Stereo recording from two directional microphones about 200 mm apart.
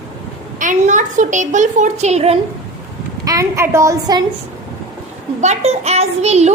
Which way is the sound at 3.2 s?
15° right (ahead or behind).